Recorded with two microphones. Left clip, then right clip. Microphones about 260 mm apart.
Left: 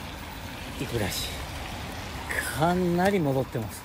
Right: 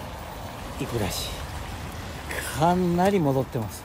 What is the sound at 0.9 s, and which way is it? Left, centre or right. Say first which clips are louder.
Speech: right 1 dB; centre.